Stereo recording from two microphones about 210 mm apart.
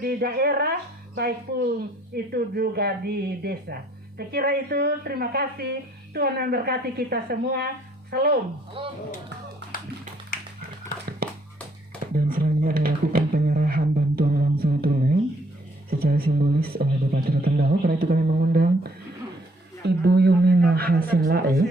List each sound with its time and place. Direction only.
0.0 s a man's voice: 45° right (ahead or behind)
8.8 s speech: 25° right (ahead or behind)
12.1 s a sound: 45° right (ahead or behind)
15.9 s a man's voice: 45° right (ahead or behind)